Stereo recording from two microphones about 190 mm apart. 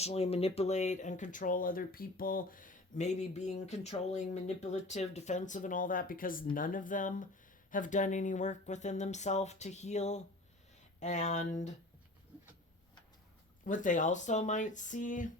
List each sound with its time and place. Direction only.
0.0 s speech: 30° left (ahead or behind)
13.7 s speech: 40° left (ahead or behind)